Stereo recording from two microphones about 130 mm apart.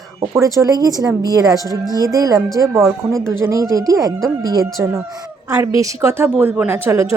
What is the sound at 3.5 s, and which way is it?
Speech, 25° right (ahead or behind).